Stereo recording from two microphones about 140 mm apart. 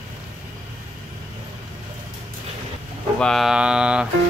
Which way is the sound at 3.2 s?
Centre (ahead or behind).